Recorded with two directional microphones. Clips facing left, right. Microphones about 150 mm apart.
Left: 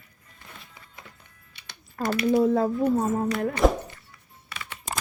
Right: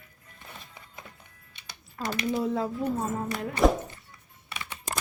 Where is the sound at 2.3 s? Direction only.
50° left (ahead or behind).